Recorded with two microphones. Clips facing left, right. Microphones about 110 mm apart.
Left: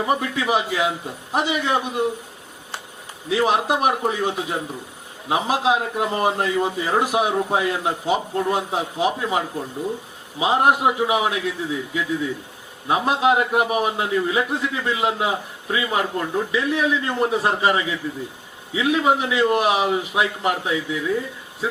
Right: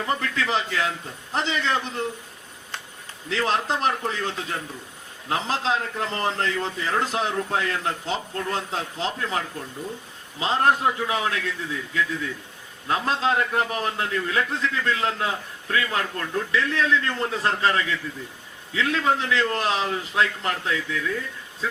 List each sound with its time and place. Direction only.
0.0 s a man's voice: 15° left (ahead or behind)
3.2 s a man's voice: 15° left (ahead or behind)